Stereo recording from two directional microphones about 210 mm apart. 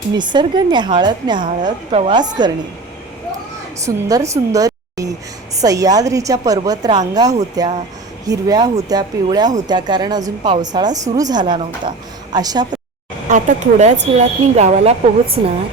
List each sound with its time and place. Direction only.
0.1 s a woman's voice: 20° right (ahead or behind)
3.8 s a woman's voice: 15° right (ahead or behind)
13.2 s a woman's voice: 35° right (ahead or behind)